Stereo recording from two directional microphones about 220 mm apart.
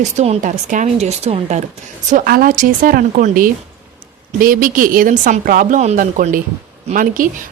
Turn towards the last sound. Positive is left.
turn(degrees=-35)  # may be behind; listen again after turning